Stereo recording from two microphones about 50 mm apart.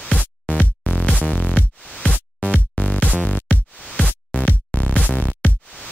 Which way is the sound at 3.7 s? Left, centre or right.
Centre.